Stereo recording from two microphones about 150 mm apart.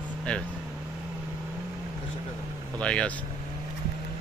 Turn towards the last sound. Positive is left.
turn(degrees=5)  # may be behind; listen again after turning